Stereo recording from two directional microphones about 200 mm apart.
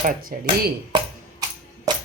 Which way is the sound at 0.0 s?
40° right (ahead or behind).